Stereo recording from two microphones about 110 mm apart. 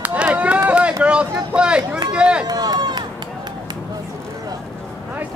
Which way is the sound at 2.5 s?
40° right (ahead or behind).